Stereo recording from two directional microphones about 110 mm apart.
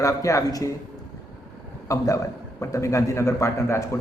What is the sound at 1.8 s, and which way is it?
A man's voice, 30° left (ahead or behind).